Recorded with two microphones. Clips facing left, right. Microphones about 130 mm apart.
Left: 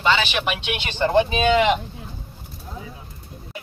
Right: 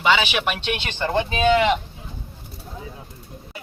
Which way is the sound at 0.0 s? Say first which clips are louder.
Right 1 dB; 10° right (ahead or behind).